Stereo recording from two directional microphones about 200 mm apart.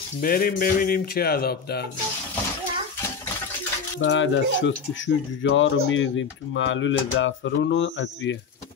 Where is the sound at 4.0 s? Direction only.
65° left (ahead or behind).